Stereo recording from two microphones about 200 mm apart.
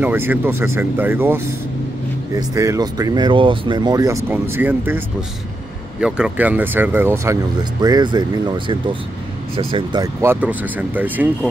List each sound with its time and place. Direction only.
0.0 s speech: 10° right (ahead or behind); by 10.0 s 25° right (ahead or behind)
10.2 s speech: 10° right (ahead or behind)